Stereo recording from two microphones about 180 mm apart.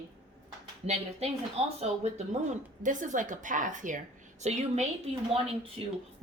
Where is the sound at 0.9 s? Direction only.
35° right (ahead or behind).